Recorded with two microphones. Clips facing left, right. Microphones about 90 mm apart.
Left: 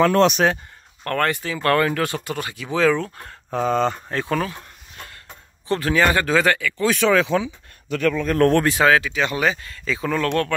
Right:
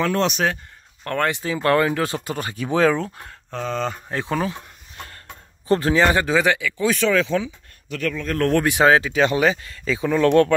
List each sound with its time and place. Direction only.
0.0 s speech: 60° left (ahead or behind)
1.0 s speech: 15° right (ahead or behind); by 2.7 s 35° right (ahead or behind)
2.7 s speech: 25° right (ahead or behind)
3.5 s speech: 10° left (ahead or behind)
4.1 s speech: 20° right (ahead or behind)
5.7 s speech: 30° right (ahead or behind)
6.2 s speech: 10° right (ahead or behind)
7.2 s speech: 15° left (ahead or behind)
7.9 s speech: 30° left (ahead or behind)
8.2 s speech: 15° left (ahead or behind)
8.5 s speech: 15° right (ahead or behind)
8.8 s speech: 30° right (ahead or behind)